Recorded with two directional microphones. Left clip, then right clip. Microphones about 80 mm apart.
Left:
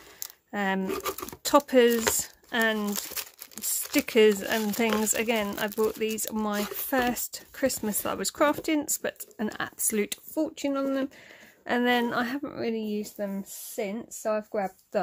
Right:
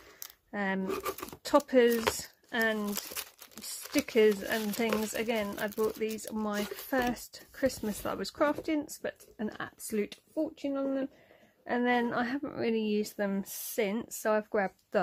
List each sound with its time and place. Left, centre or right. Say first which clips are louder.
0.5 s speech: left 4 dB; left
2.1 s a sound: left 5 dB; left
2.9 s crumpling: left 4 dB; centre
3.9 s speech: left 4 dB; left
6.5 s speech: left 3 dB; centre; by 10.1 s left
10.3 s speech: left 4 dB; left
11.6 s a woman's voice: left 4 dB; centre
12.5 s speech: right 1 dB; centre
13.0 s a woman's voice: even; right